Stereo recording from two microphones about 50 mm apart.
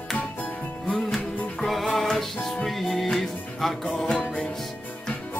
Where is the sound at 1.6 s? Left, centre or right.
Centre.